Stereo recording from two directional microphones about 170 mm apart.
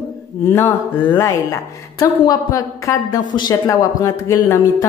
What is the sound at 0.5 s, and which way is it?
A woman's voice, 15° left (ahead or behind).